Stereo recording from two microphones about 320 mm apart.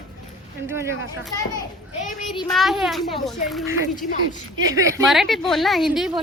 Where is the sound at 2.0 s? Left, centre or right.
Left.